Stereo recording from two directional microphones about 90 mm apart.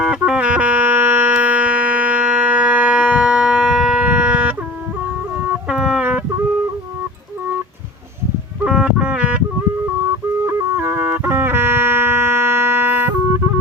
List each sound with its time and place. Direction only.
0.0 s music: 10° right (ahead or behind)
5.6 s music: 10° right (ahead or behind)
8.6 s a sound: 10° right (ahead or behind)
10.4 s music: 30° right (ahead or behind)